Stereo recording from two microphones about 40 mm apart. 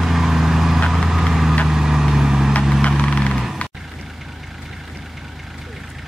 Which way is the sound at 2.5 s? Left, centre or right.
Left.